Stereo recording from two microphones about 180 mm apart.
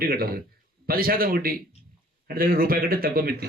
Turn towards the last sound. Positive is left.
turn(degrees=-55)  # may be behind; listen again after turning